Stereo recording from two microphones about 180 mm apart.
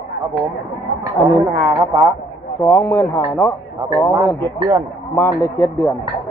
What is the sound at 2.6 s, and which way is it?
Speech, 15° left (ahead or behind).